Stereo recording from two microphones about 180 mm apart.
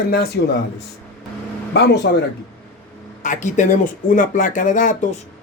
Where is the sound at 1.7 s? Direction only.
70° left (ahead or behind).